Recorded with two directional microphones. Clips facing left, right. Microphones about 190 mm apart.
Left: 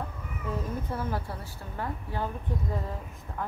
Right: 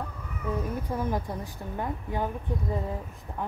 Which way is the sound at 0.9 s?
15° right (ahead or behind).